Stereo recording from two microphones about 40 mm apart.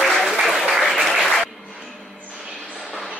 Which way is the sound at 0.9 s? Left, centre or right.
Centre.